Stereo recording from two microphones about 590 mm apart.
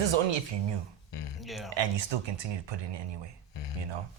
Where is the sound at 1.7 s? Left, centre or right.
Right.